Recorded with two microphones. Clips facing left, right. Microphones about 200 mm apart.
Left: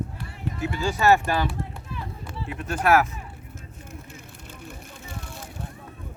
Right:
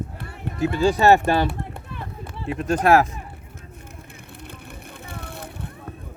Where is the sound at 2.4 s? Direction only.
30° right (ahead or behind).